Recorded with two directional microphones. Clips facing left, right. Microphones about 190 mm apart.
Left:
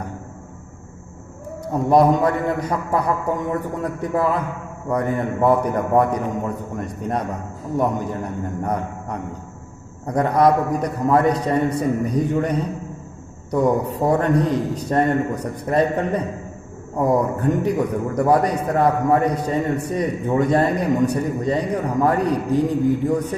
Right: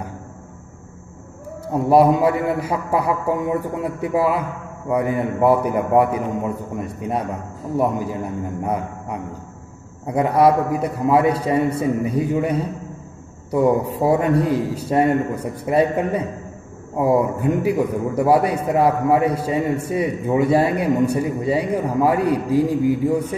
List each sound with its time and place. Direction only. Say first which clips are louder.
1.7 s a man's voice: right 1 dB; 5° right (ahead or behind)